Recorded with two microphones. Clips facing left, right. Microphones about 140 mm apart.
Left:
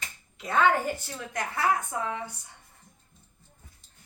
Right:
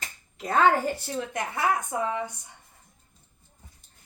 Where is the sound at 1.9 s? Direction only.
20° right (ahead or behind).